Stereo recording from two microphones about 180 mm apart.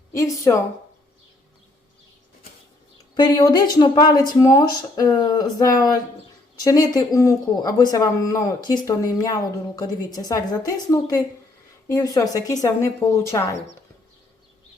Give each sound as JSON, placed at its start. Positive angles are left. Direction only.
{"t": 0.1, "sound": "speech", "side_deg": 20}
{"t": 3.2, "sound": "speech", "side_deg": 25}